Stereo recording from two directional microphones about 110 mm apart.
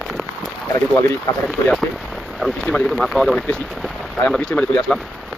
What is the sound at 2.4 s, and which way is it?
Speech, 5° left (ahead or behind).